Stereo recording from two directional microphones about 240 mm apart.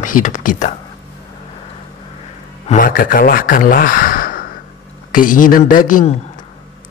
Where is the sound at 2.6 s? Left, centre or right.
Left.